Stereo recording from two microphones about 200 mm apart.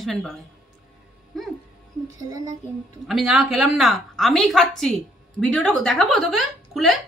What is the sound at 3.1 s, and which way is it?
A woman's voice, 5° right (ahead or behind).